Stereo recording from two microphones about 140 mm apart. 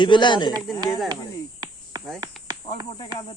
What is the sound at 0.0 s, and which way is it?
Speech, 35° left (ahead or behind).